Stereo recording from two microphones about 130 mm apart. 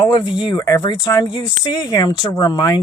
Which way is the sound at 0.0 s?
30° left (ahead or behind).